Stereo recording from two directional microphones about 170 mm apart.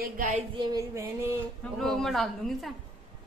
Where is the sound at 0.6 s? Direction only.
20° right (ahead or behind).